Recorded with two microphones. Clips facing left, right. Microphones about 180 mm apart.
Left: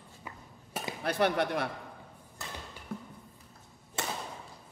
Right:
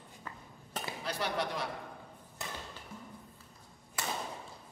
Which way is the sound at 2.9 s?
60° left (ahead or behind).